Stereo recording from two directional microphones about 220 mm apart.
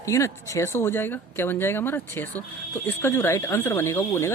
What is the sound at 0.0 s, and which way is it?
Speech, 15° left (ahead or behind).